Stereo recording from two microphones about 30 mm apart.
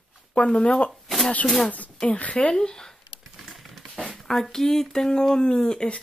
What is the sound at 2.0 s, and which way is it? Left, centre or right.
Speech, left.